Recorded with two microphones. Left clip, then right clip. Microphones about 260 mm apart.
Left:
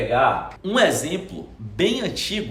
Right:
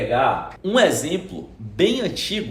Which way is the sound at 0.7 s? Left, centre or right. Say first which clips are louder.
Right 2 dB; centre.